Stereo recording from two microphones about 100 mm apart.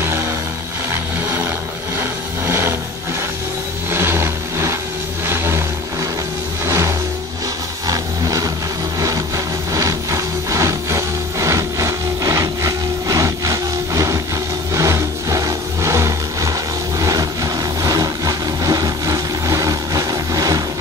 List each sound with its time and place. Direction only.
0.8 s vehicle: 25° right (ahead or behind)
3.9 s vehicle: 25° right (ahead or behind)
6.6 s music: 25° right (ahead or behind)
7.8 s vehicle: 35° right (ahead or behind)
9.7 s a sound: 35° right (ahead or behind)
14.7 s vehicle: 30° right (ahead or behind)